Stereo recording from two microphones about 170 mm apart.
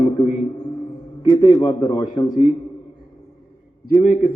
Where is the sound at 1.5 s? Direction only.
25° left (ahead or behind).